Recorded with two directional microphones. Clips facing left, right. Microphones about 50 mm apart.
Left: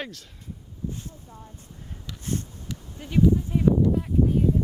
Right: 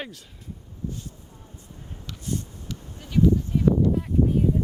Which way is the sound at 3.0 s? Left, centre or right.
Left.